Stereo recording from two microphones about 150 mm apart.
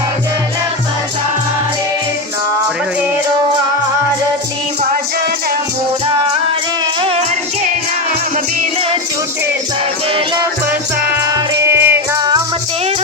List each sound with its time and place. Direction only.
11.6 s music: 15° right (ahead or behind)